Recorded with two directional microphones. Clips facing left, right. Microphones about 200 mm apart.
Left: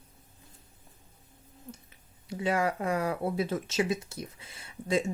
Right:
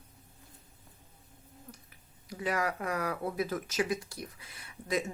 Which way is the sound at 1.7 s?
25° left (ahead or behind).